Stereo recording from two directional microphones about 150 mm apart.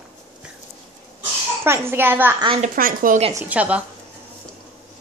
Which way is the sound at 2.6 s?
70° right (ahead or behind).